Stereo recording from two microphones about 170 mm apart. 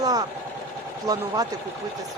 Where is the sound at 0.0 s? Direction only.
20° right (ahead or behind).